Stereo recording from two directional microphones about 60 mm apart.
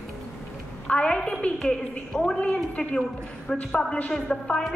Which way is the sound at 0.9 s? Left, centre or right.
Centre.